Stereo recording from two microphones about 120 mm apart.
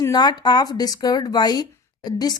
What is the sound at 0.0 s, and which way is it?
A woman's voice, 35° left (ahead or behind).